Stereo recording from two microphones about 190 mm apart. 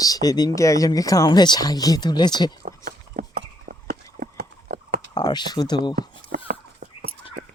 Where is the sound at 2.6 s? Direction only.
50° right (ahead or behind).